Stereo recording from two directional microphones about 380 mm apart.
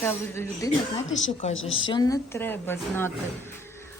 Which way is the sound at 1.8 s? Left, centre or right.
Centre.